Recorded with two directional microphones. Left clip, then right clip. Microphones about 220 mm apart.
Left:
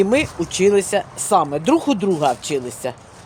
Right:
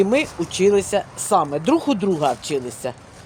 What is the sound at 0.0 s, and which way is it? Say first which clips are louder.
Speech: left 1 dB; 20° left (ahead or behind).